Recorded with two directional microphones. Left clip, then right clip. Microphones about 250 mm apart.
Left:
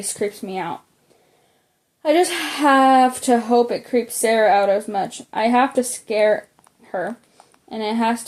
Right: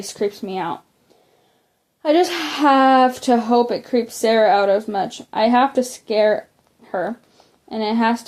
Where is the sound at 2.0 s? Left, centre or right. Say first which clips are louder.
Right 1 dB; right.